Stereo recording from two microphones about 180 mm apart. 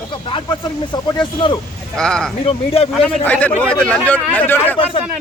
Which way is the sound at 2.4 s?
35° left (ahead or behind).